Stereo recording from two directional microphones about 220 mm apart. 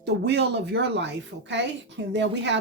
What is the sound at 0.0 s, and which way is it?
Speech, 50° right (ahead or behind).